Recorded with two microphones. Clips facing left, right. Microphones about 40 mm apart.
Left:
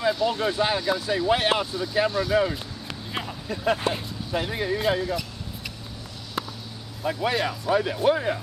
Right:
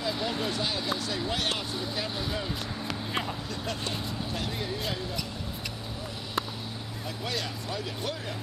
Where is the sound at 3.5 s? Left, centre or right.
Left.